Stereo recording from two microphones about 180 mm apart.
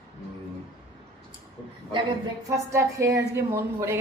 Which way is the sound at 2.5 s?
15° right (ahead or behind).